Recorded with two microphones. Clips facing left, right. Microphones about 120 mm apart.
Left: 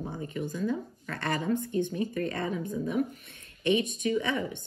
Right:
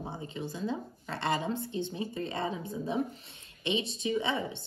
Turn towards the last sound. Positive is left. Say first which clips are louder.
# left 2 dB
turn(degrees=-20)  # may be behind; listen again after turning